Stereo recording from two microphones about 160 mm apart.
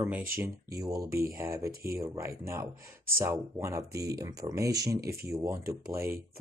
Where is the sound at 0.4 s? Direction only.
20° right (ahead or behind).